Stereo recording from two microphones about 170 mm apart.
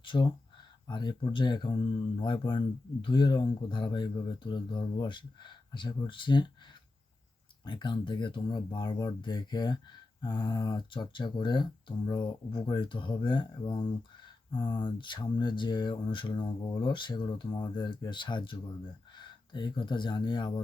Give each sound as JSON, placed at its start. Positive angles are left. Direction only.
{"t": 0.0, "sound": "speech", "side_deg": 30}
{"t": 7.6, "sound": "speech", "side_deg": 30}